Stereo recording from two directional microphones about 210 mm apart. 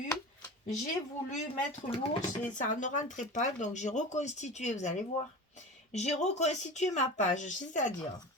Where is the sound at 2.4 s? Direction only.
35° left (ahead or behind).